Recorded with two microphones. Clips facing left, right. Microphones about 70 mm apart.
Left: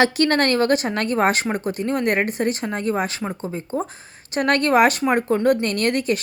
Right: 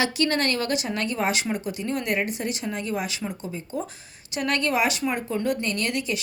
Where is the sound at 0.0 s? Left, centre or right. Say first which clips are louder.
Left 6 dB; left.